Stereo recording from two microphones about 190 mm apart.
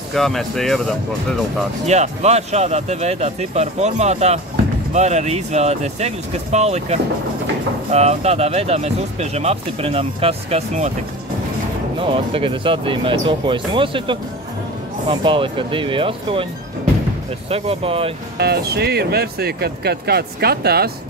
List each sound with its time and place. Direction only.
0.1 s speech: centre (ahead or behind)
1.9 s speech: 35° right (ahead or behind)
12.0 s speech: 25° right (ahead or behind)
17.5 s speech: 30° right (ahead or behind)
18.4 s speech: 55° right (ahead or behind)